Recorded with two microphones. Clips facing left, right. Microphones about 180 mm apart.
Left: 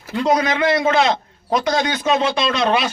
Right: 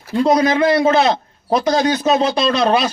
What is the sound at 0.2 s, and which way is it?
A man's voice, 35° right (ahead or behind).